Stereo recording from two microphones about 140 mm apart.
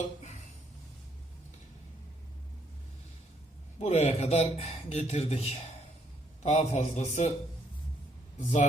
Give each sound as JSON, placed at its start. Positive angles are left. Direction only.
{"t": 3.8, "sound": "a man's voice", "side_deg": 50}
{"t": 8.4, "sound": "a man's voice", "side_deg": 65}